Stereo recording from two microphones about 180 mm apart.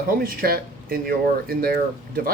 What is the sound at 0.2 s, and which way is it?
Speech, 55° right (ahead or behind).